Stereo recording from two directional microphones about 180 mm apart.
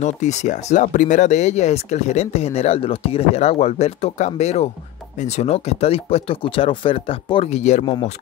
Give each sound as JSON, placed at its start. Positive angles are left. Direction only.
{"t": 0.0, "sound": "speech", "side_deg": 40}